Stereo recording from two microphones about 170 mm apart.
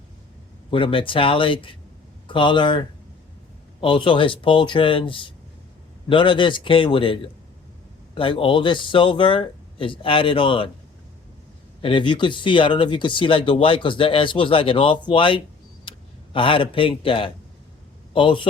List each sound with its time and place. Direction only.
0.7 s speech: 30° left (ahead or behind)
11.8 s speech: 30° left (ahead or behind)